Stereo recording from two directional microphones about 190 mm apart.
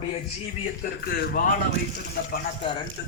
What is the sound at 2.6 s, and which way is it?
Speech, 25° left (ahead or behind).